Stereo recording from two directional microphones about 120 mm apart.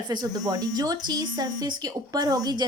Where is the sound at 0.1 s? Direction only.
35° right (ahead or behind).